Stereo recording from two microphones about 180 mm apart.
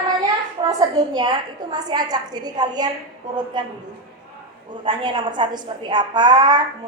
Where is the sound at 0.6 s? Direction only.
25° right (ahead or behind).